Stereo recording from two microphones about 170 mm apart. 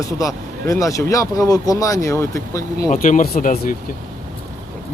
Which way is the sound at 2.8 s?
50° left (ahead or behind).